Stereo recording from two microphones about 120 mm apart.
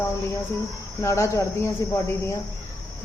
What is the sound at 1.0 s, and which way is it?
Speech, 25° left (ahead or behind).